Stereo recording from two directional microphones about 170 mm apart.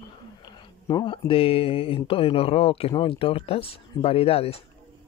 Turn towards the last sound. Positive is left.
turn(degrees=35)  # may be behind; listen again after turning